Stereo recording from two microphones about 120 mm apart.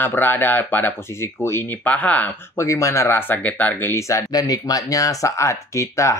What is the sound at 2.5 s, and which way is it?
Speech, 25° left (ahead or behind).